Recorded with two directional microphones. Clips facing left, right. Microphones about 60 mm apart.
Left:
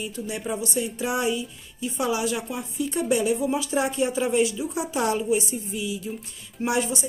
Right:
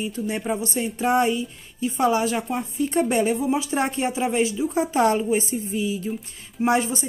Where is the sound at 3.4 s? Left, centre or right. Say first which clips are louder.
Right 1 dB; right.